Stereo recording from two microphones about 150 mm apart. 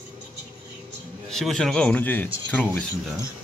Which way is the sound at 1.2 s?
Centre (ahead or behind).